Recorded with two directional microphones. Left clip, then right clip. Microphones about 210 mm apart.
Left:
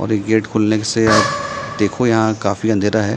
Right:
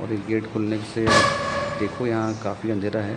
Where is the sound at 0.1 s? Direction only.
40° left (ahead or behind).